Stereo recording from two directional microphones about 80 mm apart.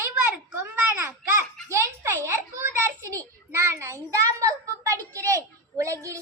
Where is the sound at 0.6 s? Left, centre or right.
Right.